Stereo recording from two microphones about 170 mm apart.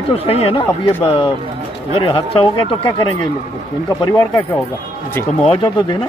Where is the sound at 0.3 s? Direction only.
35° left (ahead or behind).